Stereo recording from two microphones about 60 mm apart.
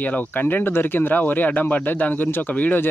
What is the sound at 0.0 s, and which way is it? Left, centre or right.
Speech, left.